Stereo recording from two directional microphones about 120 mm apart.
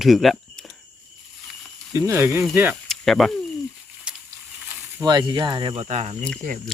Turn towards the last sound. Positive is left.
turn(degrees=-65)  # may be behind; listen again after turning